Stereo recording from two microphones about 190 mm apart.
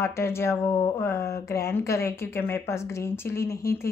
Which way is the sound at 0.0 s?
15° left (ahead or behind).